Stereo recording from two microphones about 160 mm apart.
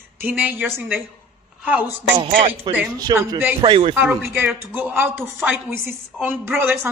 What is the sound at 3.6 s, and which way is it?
Speech, 35° right (ahead or behind).